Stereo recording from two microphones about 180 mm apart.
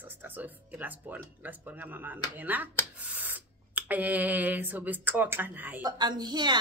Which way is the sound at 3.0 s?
10° right (ahead or behind).